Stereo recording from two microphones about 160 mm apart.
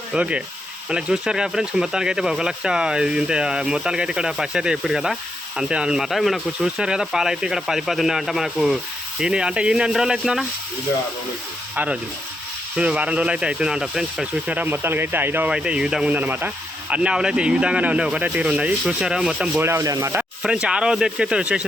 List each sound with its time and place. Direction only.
0.1 s speech: 5° right (ahead or behind)
12.7 s speech: 10° right (ahead or behind)
20.4 s speech: 5° right (ahead or behind)